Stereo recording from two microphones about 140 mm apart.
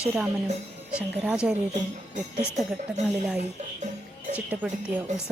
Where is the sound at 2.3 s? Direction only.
55° right (ahead or behind).